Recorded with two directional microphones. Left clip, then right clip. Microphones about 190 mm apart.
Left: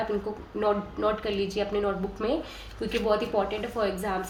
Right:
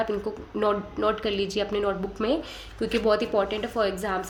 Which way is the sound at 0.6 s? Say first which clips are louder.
Right 2 dB; 45° right (ahead or behind).